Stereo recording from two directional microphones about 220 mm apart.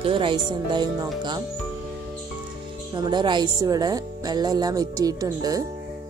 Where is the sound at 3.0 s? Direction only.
20° right (ahead or behind).